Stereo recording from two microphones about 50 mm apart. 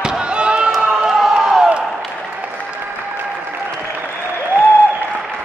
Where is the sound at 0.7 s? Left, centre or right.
Centre.